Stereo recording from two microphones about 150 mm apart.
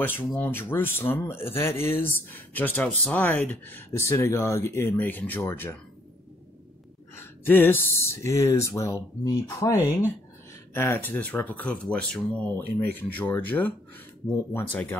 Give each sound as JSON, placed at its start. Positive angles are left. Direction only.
{"t": 0.0, "sound": "speech", "side_deg": 15}
{"t": 7.2, "sound": "speech", "side_deg": 15}